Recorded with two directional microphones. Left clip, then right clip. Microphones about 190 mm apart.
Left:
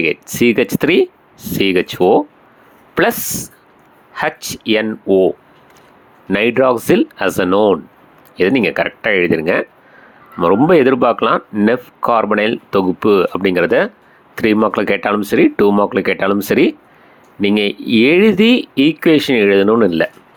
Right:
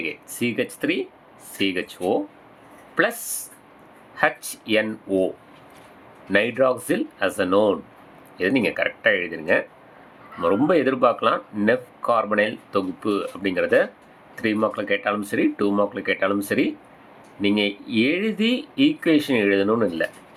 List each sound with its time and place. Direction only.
0.0 s speech: 35° left (ahead or behind)
6.3 s speech: 35° left (ahead or behind)